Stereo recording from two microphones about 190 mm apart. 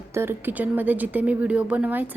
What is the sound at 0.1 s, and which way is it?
A woman's voice, 10° right (ahead or behind).